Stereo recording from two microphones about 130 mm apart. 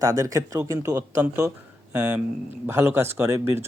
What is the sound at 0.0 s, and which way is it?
Speech, 25° right (ahead or behind).